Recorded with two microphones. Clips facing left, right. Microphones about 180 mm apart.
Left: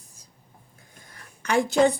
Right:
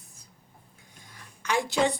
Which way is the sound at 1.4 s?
55° left (ahead or behind).